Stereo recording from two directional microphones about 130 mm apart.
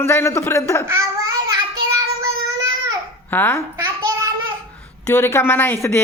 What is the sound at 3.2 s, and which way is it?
Speech, 15° left (ahead or behind).